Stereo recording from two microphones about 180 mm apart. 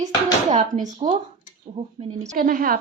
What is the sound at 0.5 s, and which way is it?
Speech, 45° right (ahead or behind).